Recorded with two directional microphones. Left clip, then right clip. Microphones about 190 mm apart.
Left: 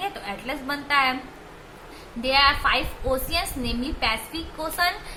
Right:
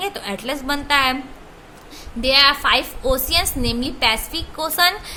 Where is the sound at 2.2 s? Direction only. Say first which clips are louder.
Right 5 dB; 50° right (ahead or behind).